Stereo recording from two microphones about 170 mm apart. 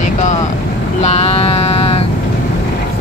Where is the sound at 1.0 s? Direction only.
40° left (ahead or behind).